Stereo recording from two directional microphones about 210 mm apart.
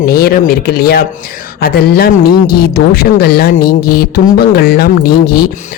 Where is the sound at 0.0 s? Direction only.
45° left (ahead or behind).